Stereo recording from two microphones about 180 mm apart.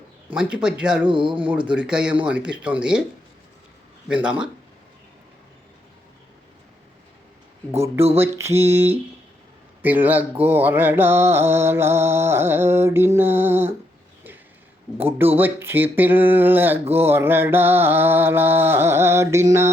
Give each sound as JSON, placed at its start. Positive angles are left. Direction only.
{"t": 0.3, "sound": "speech", "side_deg": -5}
{"t": 1.0, "sound": "speech", "side_deg": -25}
{"t": 1.5, "sound": "mantra", "side_deg": -5}
{"t": 4.1, "sound": "mantra", "side_deg": -5}
{"t": 8.2, "sound": "mantra", "side_deg": -15}
{"t": 14.9, "sound": "mantra", "side_deg": -10}